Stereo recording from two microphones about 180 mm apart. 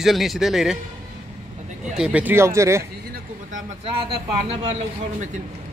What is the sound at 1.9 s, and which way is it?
Speech, 5° right (ahead or behind).